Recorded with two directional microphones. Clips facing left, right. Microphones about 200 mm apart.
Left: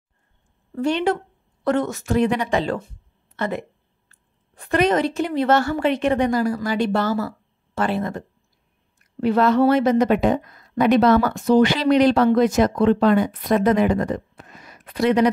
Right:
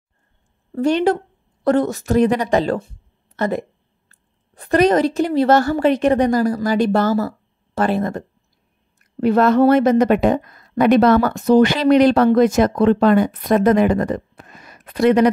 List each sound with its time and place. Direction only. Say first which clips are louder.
0.7 s a woman's voice: right 4 dB; 40° right (ahead or behind)
9.2 s a woman's voice: right 3 dB; 50° right (ahead or behind)